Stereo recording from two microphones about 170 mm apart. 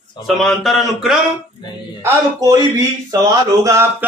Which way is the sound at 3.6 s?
15° right (ahead or behind).